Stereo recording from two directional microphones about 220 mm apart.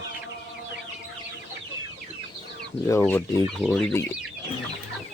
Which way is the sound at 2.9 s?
10° left (ahead or behind).